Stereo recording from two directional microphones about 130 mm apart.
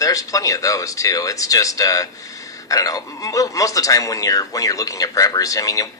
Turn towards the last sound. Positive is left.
turn(degrees=25)  # may be behind; listen again after turning